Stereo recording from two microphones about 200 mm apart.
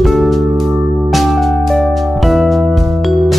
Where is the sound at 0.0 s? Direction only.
Centre (ahead or behind).